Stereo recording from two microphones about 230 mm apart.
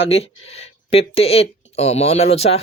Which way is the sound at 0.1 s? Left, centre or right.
Left.